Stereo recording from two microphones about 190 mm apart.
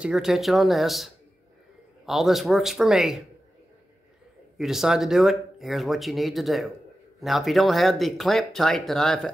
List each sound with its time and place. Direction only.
0.0 s speech: centre (ahead or behind)
4.6 s speech: centre (ahead or behind)